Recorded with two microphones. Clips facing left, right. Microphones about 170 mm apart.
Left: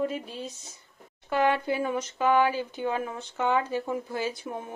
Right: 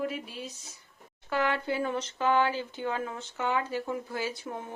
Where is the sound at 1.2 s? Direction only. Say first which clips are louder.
Left 4 dB; 20° left (ahead or behind).